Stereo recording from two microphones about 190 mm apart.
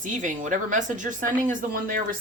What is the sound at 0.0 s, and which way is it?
Speech, 40° right (ahead or behind).